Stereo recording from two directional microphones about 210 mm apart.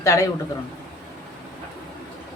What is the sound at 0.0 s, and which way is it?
Speech, 15° left (ahead or behind).